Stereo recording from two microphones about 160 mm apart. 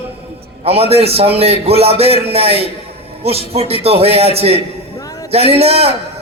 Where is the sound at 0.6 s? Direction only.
40° right (ahead or behind).